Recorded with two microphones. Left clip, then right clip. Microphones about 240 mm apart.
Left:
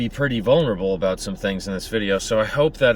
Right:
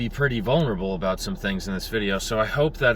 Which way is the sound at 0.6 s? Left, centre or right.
Centre.